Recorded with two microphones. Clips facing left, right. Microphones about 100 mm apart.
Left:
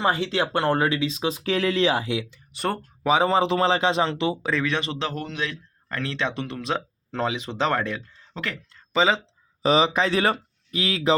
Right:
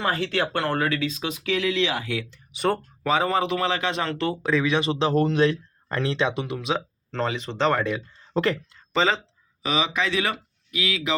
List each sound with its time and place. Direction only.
0.0 s speech: 20° left (ahead or behind)
2.5 s speech: centre (ahead or behind)
3.0 s speech: 20° left (ahead or behind)
4.4 s speech: 10° right (ahead or behind)
5.1 s speech: 35° right (ahead or behind)
5.9 s speech: 20° right (ahead or behind); by 6.8 s 5° right (ahead or behind)
7.1 s speech: 10° left (ahead or behind)
8.3 s speech: 40° right (ahead or behind)
8.9 s speech: 10° left (ahead or behind)
9.6 s speech: 35° left (ahead or behind)